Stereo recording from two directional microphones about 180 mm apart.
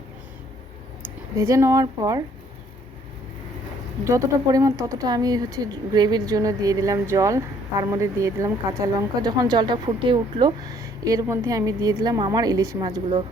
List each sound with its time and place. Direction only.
1.4 s speech: 15° right (ahead or behind)
4.0 s speech: 15° right (ahead or behind)